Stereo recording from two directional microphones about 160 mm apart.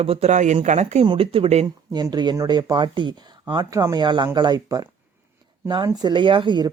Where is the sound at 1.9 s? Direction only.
25° right (ahead or behind).